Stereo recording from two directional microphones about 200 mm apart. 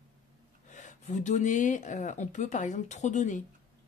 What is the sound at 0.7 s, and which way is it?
Speech, 35° left (ahead or behind).